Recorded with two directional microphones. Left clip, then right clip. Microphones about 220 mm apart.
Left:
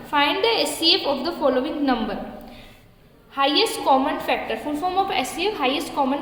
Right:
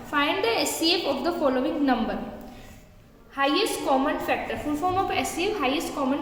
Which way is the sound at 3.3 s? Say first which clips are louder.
Left 4 dB; 20° left (ahead or behind).